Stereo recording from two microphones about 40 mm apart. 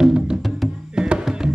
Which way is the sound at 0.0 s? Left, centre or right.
Right.